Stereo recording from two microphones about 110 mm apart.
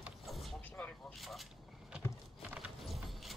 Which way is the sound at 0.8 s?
15° left (ahead or behind).